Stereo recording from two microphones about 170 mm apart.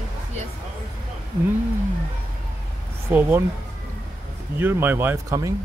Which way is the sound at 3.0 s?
10° right (ahead or behind).